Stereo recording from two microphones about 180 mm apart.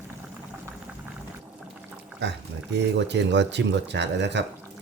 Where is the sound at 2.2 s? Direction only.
70° right (ahead or behind).